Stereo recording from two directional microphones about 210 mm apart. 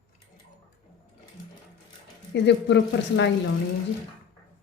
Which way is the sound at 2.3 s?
55° left (ahead or behind).